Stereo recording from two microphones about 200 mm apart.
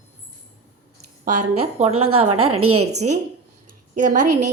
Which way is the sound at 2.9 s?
35° right (ahead or behind).